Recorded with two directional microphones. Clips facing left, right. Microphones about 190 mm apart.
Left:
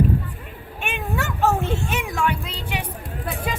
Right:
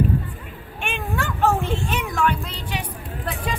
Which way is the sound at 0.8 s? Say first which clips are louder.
Even; 5° left (ahead or behind).